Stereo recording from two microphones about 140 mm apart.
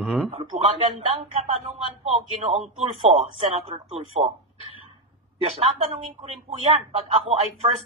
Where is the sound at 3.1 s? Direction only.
45° right (ahead or behind).